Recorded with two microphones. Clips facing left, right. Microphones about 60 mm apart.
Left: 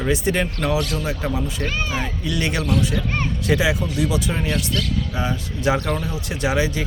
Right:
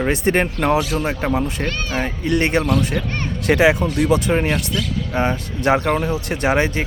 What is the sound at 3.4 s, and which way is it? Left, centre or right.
Speech, right.